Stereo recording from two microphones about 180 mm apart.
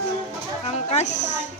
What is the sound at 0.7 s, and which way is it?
Speech, 40° left (ahead or behind).